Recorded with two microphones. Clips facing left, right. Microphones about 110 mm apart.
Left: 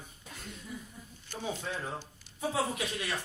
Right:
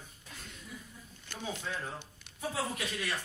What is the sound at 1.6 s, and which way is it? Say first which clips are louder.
A man's voice: left 2 dB; 15° left (ahead or behind).